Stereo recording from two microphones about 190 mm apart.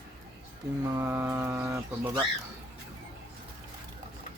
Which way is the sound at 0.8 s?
15° right (ahead or behind).